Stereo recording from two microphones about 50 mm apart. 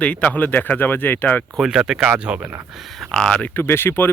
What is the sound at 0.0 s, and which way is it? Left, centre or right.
Speech, left.